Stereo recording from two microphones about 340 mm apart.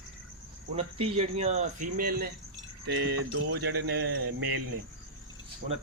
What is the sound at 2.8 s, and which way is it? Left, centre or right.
Cricket, right.